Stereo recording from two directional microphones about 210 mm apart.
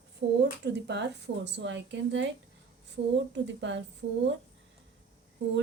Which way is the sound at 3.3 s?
60° right (ahead or behind).